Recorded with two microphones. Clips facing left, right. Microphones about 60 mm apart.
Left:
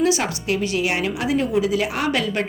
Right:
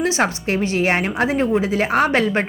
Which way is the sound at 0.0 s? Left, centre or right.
Right.